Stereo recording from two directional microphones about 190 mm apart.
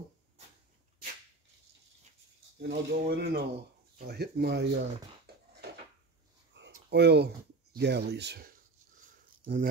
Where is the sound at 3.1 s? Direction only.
55° right (ahead or behind).